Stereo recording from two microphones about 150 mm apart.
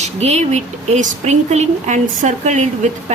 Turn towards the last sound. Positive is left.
turn(degrees=-50)  # may be behind; listen again after turning